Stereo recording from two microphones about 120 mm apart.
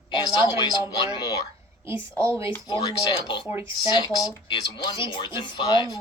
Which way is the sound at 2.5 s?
40° left (ahead or behind).